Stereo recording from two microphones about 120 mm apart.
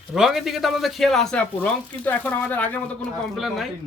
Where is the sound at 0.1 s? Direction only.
Centre (ahead or behind).